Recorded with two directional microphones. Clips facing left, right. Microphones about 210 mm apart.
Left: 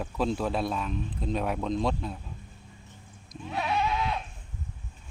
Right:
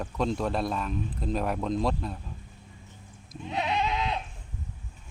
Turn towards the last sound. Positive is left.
turn(degrees=-20)  # may be behind; listen again after turning